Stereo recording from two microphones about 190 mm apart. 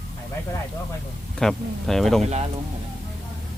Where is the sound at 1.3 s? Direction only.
Centre (ahead or behind).